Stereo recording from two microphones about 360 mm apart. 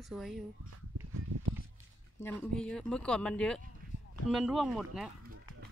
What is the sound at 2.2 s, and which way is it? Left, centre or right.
Speech, centre.